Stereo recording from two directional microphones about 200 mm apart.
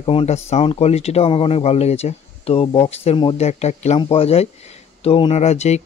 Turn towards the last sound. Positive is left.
turn(degrees=35)  # may be behind; listen again after turning